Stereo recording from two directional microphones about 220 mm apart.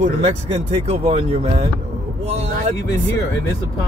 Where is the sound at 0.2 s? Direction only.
30° right (ahead or behind).